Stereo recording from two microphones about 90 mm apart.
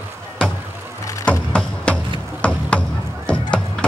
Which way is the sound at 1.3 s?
10° left (ahead or behind).